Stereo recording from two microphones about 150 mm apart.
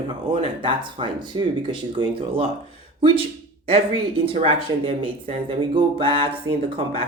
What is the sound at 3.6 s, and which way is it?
Speech, 40° right (ahead or behind).